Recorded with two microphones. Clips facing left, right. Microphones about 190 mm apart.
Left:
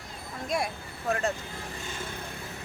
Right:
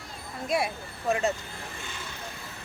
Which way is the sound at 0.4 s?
5° right (ahead or behind).